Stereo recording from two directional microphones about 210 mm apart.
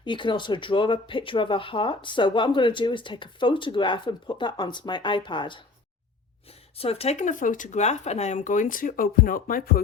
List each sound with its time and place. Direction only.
0.0 s speech: 20° left (ahead or behind)
6.7 s speech: 30° left (ahead or behind); by 9.8 s 45° left (ahead or behind)